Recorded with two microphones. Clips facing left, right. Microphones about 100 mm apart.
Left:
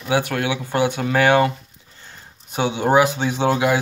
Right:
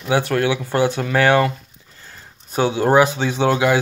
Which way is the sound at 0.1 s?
15° left (ahead or behind).